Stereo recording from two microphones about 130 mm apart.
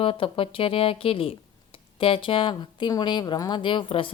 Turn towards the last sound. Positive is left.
turn(degrees=40)  # may be behind; listen again after turning